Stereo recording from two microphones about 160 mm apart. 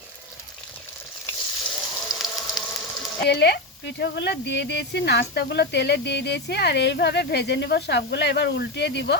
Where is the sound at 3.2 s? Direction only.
90° left.